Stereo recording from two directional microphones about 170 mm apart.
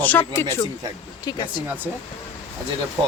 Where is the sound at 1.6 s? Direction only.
10° right (ahead or behind).